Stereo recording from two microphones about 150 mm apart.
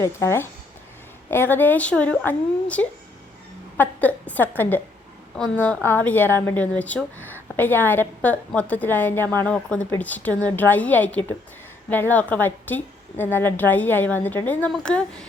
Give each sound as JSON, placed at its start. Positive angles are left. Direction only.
{"t": 0.0, "sound": "a woman's voice", "side_deg": 20}